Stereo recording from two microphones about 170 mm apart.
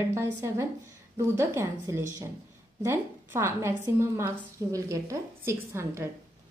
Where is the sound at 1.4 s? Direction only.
15° right (ahead or behind).